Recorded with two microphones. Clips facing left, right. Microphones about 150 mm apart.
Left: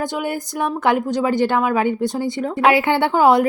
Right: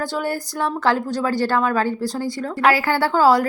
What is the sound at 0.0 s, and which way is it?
A woman's voice, 15° left (ahead or behind).